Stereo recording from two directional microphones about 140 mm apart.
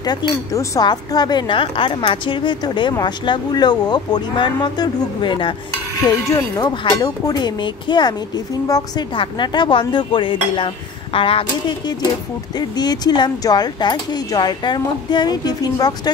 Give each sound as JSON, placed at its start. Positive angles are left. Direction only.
{"t": 0.0, "sound": "speech", "side_deg": 30}
{"t": 12.5, "sound": "speech", "side_deg": 30}